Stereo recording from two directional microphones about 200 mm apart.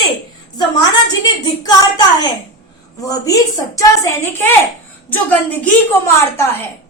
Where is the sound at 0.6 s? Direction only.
20° left (ahead or behind).